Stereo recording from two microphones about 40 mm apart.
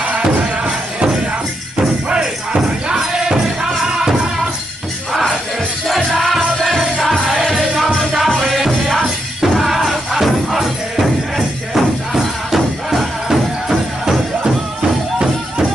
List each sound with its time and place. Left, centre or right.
0.7 s music: right
6.1 s music: centre
7.5 s music: centre
8.0 s music: centre